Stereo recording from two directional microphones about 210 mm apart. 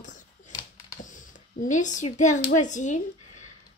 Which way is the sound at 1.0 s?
40° left (ahead or behind).